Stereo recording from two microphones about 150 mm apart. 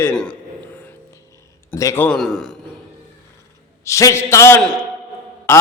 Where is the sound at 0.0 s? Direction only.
10° left (ahead or behind).